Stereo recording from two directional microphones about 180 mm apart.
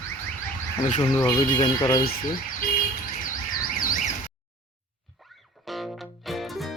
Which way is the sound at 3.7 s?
50° left (ahead or behind).